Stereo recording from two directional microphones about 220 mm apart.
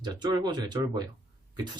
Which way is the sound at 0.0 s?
20° right (ahead or behind).